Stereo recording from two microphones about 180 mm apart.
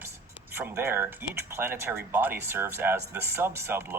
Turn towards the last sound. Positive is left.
turn(degrees=-15)  # may be behind; listen again after turning